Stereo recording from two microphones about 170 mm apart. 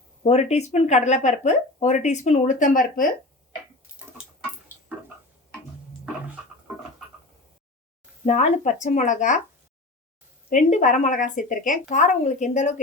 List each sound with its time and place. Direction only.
0.3 s speech: 40° left (ahead or behind)
8.2 s speech: 40° left (ahead or behind)
10.5 s speech: 45° left (ahead or behind)